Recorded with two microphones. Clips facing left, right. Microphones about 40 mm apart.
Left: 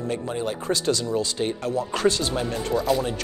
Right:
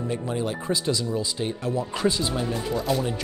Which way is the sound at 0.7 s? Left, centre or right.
Left.